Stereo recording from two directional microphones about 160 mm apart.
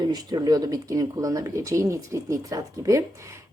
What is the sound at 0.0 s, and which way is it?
A woman's voice, 25° right (ahead or behind).